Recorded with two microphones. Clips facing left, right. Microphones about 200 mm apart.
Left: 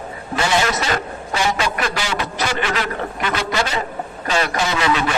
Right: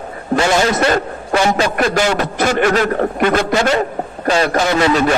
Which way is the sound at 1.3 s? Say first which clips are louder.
Right 6 dB; 50° right (ahead or behind).